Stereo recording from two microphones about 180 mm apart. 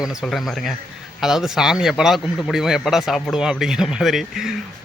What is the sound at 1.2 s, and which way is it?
A man's voice, centre (ahead or behind).